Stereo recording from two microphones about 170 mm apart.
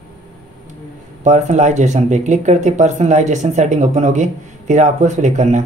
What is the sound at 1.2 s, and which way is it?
Speech, 45° right (ahead or behind).